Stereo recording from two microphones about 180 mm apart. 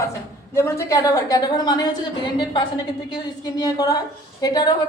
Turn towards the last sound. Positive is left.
turn(degrees=20)  # may be behind; listen again after turning